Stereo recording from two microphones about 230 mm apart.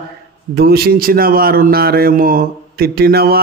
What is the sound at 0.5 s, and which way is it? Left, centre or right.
Mantra, right.